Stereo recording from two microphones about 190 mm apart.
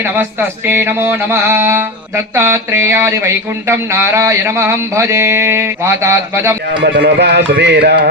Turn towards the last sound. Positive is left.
turn(degrees=-65)  # may be behind; listen again after turning